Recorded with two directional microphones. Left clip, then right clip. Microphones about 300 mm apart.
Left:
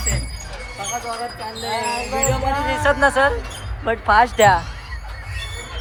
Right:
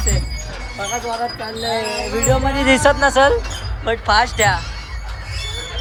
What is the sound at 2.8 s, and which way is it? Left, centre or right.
A woman's voice, centre.